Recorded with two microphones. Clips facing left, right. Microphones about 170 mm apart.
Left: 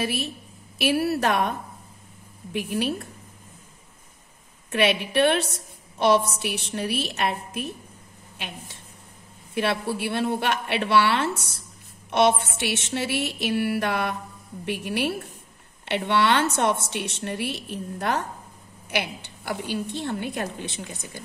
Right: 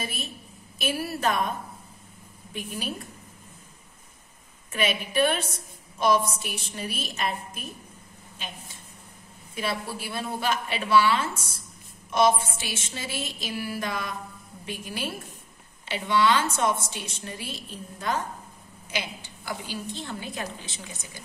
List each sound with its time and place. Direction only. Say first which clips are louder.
0.0 s a woman's voice: left 8 dB; 70° left (ahead or behind)
2.5 s a woman's voice: left 8 dB; 65° left (ahead or behind)
4.6 s a woman's voice: left 5 dB; 70° left (ahead or behind)
9.5 s a woman's voice: left 6 dB; 65° left (ahead or behind)